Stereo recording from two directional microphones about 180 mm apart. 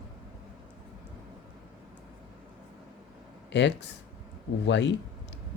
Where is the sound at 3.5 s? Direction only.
75° left (ahead or behind).